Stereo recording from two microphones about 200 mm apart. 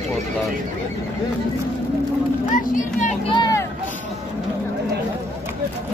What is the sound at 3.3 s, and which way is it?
Vehicle, 20° left (ahead or behind).